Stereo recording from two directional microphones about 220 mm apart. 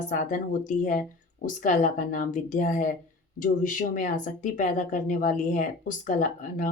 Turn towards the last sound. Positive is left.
turn(degrees=35)  # may be behind; listen again after turning